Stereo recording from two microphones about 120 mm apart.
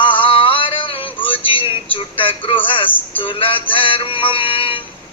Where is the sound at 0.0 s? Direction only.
45° left (ahead or behind).